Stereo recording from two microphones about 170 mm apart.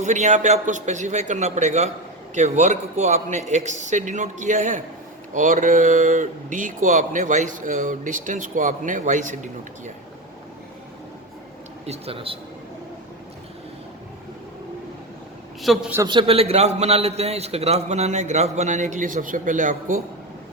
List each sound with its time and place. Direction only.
0.0 s speech: 45° right (ahead or behind)
11.9 s a man's voice: 35° right (ahead or behind)
15.6 s a man's voice: centre (ahead or behind)
16.0 s a man's voice: 30° right (ahead or behind); by 20.0 s 50° right (ahead or behind)